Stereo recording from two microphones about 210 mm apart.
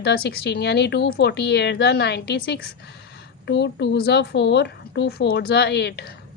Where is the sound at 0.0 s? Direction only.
50° left (ahead or behind).